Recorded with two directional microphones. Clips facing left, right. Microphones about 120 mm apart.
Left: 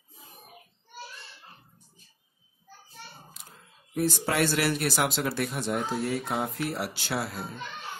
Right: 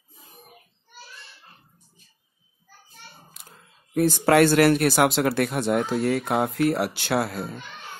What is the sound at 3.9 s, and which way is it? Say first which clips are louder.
Speech: right 9 dB; 65° right (ahead or behind).